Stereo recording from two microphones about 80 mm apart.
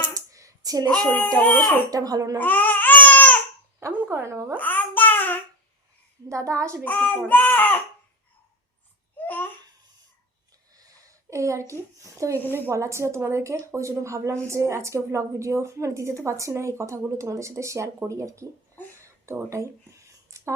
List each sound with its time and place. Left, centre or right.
0.1 s hands: right
1.0 s a child's voice: left
1.9 s a child's voice: right
2.4 s babbling: left
3.8 s a sound: right
4.5 s a sound: left
6.2 s a woman's voice: right
6.8 s a child's voice: left
9.1 s babbling: left
10.8 s a woman's voice: right
19.0 s a sound: right